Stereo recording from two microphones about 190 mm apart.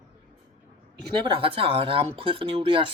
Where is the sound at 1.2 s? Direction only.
25° right (ahead or behind).